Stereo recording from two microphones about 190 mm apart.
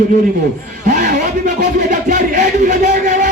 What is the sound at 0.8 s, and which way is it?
Music, 40° right (ahead or behind).